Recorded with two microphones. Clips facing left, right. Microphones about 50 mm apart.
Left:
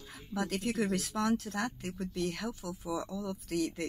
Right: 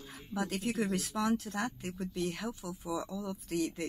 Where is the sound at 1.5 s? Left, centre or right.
Right.